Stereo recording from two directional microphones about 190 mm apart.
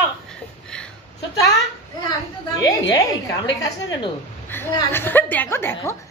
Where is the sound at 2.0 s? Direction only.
20° left (ahead or behind).